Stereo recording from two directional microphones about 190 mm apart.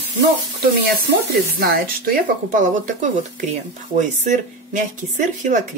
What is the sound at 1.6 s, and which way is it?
Speech, 50° right (ahead or behind).